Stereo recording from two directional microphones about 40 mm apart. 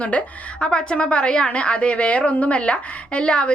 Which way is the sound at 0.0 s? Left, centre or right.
Left.